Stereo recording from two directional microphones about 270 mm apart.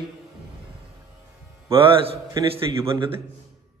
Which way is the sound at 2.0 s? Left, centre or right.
Right.